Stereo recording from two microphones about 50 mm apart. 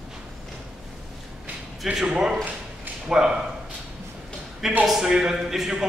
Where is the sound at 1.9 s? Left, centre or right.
Centre.